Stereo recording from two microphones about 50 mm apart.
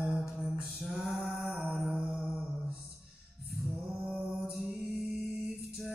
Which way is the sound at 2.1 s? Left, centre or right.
Centre.